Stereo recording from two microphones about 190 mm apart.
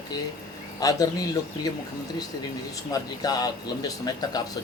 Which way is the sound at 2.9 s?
20° left (ahead or behind).